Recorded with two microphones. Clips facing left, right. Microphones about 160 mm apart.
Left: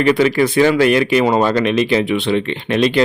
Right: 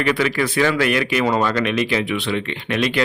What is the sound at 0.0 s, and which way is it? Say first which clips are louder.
Speech: left 6 dB; 25° left (ahead or behind).